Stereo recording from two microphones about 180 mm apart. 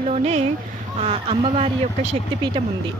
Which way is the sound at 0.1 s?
35° right (ahead or behind).